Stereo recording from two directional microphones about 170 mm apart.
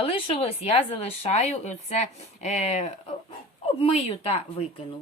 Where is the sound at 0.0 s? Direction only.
35° left (ahead or behind).